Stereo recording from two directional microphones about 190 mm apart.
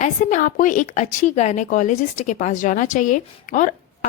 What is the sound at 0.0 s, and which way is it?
A woman's voice, 45° left (ahead or behind).